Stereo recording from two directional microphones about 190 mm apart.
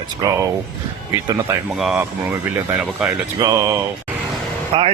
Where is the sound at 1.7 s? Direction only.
5° right (ahead or behind).